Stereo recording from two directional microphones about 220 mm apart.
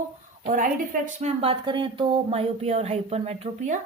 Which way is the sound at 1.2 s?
25° right (ahead or behind).